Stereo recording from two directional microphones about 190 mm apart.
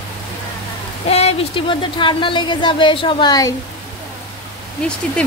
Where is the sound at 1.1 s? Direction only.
35° left (ahead or behind).